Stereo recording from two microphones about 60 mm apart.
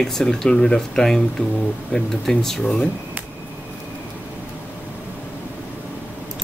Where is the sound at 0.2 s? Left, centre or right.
Centre.